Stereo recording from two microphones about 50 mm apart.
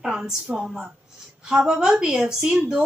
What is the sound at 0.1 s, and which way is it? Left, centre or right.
A woman's voice, centre.